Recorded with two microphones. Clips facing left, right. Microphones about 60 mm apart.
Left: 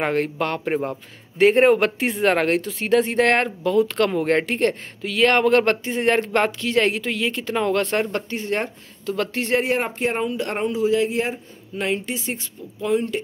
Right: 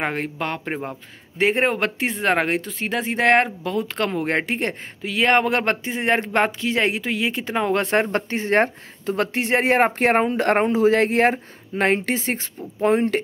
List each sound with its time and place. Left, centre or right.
0.0 s speech: centre; by 9.6 s right
9.6 s speech: right